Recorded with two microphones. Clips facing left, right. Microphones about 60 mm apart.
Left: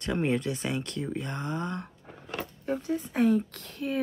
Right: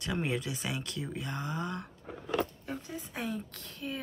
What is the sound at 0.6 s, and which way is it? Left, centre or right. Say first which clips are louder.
Speech: left 5 dB; centre.